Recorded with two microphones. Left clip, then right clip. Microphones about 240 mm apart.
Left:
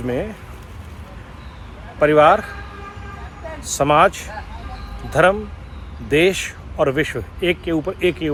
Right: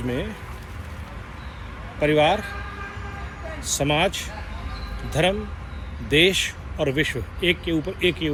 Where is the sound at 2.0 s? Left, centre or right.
Left.